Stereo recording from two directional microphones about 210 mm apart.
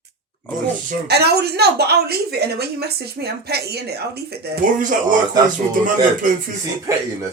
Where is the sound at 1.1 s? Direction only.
50° right (ahead or behind).